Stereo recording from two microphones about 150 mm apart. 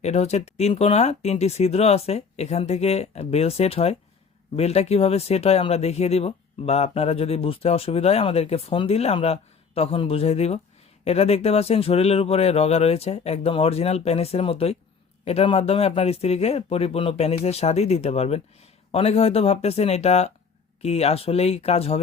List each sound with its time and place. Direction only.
0.0 s speech: 45° left (ahead or behind)